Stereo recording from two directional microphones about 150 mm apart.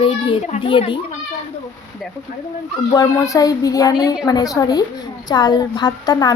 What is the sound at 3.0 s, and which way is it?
A woman's voice, 20° left (ahead or behind).